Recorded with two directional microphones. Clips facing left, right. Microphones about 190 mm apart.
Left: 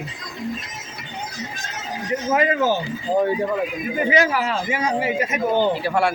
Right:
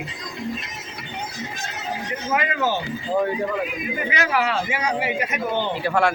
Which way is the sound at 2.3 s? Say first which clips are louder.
Left 4 dB; 40° left (ahead or behind).